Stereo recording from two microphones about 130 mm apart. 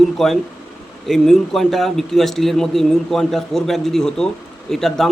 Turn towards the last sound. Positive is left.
turn(degrees=0)  # may be behind; listen again after turning